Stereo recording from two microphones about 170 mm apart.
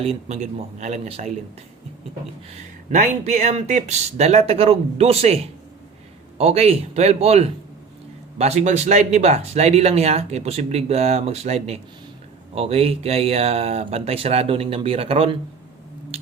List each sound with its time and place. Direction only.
0.0 s speech: 40° right (ahead or behind)
2.9 s speech: 50° right (ahead or behind)